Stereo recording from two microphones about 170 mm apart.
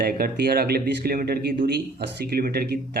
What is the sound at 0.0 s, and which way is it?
Speech, 60° right (ahead or behind).